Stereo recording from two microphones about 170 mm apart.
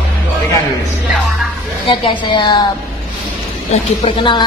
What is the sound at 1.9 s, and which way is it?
Speech, 30° left (ahead or behind).